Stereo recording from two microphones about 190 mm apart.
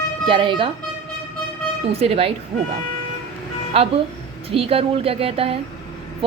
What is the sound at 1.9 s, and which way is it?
Speech, 30° right (ahead or behind).